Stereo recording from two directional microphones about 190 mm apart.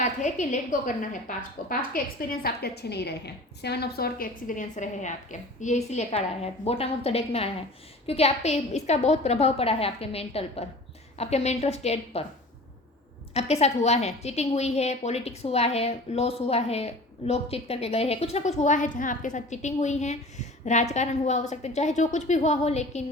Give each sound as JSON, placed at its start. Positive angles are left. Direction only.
{"t": 0.0, "sound": "a woman's voice", "side_deg": 40}
{"t": 13.3, "sound": "a woman's voice", "side_deg": 35}